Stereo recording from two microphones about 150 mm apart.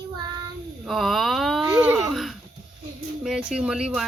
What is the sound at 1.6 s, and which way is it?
Baby cry, 10° right (ahead or behind).